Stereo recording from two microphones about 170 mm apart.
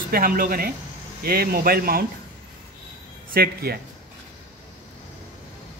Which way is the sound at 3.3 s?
65° right (ahead or behind).